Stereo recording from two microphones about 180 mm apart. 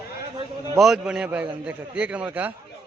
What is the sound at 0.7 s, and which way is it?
A man's voice, centre (ahead or behind).